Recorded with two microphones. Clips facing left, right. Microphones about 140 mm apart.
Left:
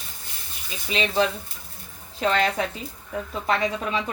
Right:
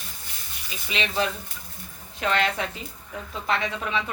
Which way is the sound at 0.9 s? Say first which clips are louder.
Left 4 dB; 35° left (ahead or behind).